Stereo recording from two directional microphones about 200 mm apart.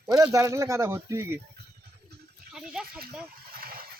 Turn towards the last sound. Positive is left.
turn(degrees=-50)  # may be behind; listen again after turning